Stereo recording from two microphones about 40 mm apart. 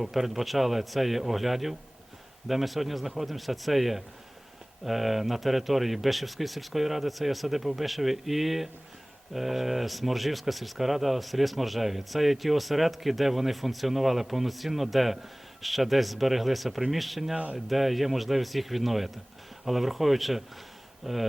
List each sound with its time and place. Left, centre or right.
0.0 s speech: centre
17.3 s speech: right
17.7 s speech: centre